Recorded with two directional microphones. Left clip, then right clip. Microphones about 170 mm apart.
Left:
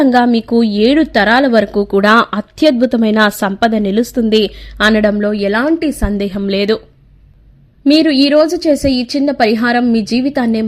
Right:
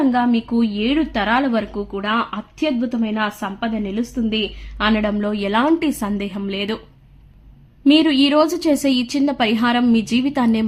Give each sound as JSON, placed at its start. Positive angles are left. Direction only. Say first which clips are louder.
{"t": 0.0, "sound": "a woman's voice", "louder": "left 7 dB", "side_deg": 40}
{"t": 1.7, "sound": "speech", "louder": "left 12 dB", "side_deg": 55}
{"t": 4.9, "sound": "a woman's voice", "louder": "left 8 dB", "side_deg": 30}
{"t": 6.1, "sound": "a woman's voice", "louder": "left 9 dB", "side_deg": 35}
{"t": 7.9, "sound": "a woman's voice", "louder": "left 4 dB", "side_deg": 20}